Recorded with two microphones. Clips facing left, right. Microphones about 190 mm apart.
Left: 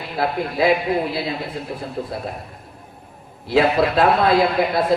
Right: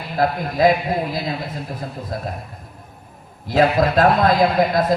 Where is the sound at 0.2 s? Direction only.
40° right (ahead or behind).